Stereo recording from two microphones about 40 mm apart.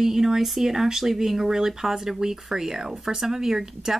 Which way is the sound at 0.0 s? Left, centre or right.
Centre.